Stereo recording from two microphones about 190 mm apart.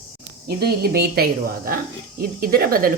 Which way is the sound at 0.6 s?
55° right (ahead or behind).